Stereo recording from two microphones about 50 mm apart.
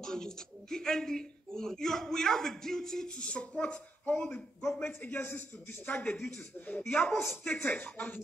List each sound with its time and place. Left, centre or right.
0.0 s speech: centre
3.2 s speech: left
4.8 s a man's voice: left